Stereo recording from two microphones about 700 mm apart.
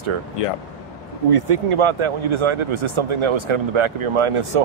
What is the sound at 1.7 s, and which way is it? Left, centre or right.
Speech, right.